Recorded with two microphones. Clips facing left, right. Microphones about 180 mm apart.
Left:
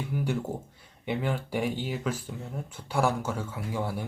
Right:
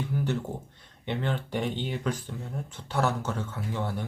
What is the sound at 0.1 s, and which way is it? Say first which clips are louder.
Speech: even; 10° left (ahead or behind).